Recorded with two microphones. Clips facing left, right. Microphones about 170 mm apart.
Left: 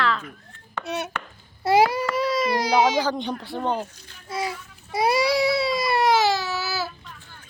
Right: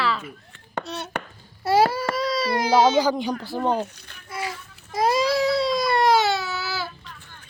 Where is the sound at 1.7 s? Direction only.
15° left (ahead or behind).